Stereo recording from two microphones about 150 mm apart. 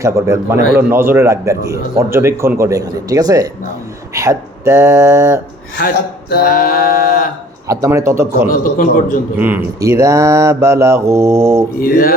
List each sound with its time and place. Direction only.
0.0 s a man's voice: 20° right (ahead or behind)
6.3 s a sound: 85° left
7.7 s speech: 20° right (ahead or behind)
8.4 s a man's voice: 65° left (ahead or behind)
9.4 s speech: 15° right (ahead or behind)
11.8 s a sound: 80° left